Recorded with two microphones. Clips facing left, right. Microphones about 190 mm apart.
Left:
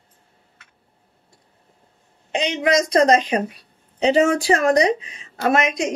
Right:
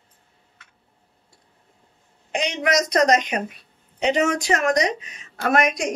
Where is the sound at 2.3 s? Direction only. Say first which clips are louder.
Left 3 dB; 25° left (ahead or behind).